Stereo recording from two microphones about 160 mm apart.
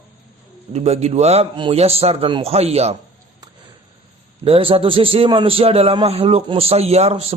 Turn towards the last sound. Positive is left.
turn(degrees=-40)  # may be behind; listen again after turning